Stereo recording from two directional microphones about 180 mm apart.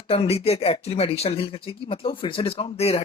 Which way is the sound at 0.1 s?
35° left (ahead or behind).